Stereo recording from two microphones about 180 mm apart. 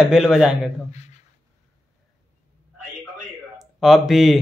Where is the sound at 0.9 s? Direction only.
40° left (ahead or behind).